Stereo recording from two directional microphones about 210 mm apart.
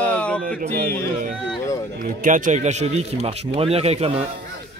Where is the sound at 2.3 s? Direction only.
40° right (ahead or behind).